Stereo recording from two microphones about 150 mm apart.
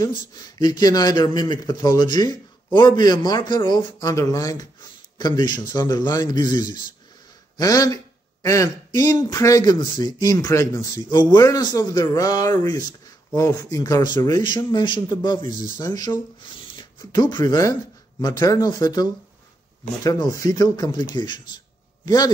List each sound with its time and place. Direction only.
0.0 s a man's voice: 30° left (ahead or behind)